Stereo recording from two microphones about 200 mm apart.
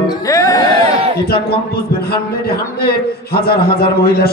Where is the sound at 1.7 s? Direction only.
50° left (ahead or behind).